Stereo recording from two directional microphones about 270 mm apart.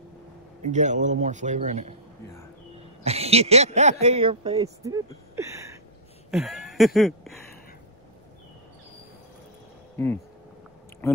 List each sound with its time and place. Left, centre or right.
0.6 s speech: right
3.0 s speech: right
6.3 s a sound: centre